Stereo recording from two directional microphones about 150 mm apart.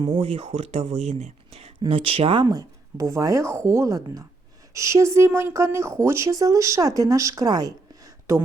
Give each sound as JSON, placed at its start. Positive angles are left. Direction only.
{"t": 0.0, "sound": "speech", "side_deg": -35}
{"t": 1.2, "sound": "a sound", "side_deg": -45}
{"t": 1.8, "sound": "speech", "side_deg": -40}